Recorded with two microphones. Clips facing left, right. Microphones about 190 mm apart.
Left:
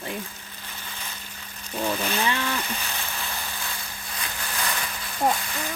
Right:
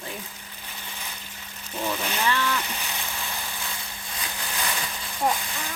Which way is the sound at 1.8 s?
15° left (ahead or behind).